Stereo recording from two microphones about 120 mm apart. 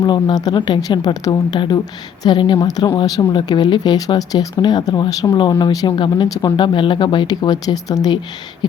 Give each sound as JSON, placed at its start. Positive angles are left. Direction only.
{"t": 0.0, "sound": "speech", "side_deg": 35}